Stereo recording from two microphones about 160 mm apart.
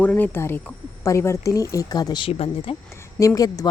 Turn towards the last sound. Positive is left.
turn(degrees=20)  # may be behind; listen again after turning